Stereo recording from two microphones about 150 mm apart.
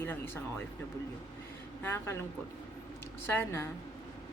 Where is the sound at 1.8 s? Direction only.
15° left (ahead or behind).